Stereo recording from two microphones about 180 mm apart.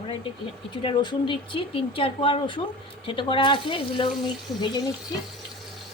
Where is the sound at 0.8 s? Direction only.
30° left (ahead or behind).